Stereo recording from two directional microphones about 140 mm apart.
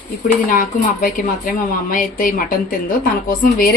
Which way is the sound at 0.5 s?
80° left.